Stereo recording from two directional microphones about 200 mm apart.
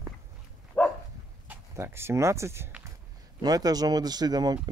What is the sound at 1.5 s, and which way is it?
Speech, 10° right (ahead or behind).